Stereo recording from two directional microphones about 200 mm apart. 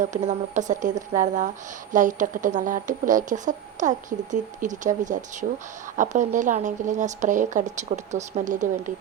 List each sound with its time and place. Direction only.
0.3 s speech: 40° right (ahead or behind)